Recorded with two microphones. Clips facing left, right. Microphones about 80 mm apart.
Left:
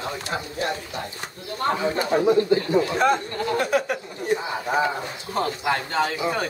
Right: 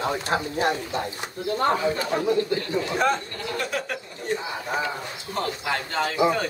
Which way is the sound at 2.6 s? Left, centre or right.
Centre.